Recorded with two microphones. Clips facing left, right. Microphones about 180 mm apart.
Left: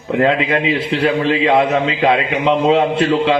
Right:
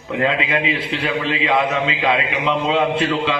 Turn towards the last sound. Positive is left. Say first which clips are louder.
# left 5 dB
turn(degrees=35)  # may be behind; listen again after turning